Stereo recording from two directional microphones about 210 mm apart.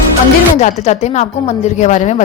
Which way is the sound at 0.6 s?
30° left (ahead or behind).